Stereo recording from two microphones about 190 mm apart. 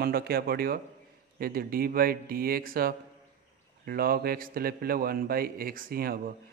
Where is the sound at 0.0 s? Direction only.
55° right (ahead or behind).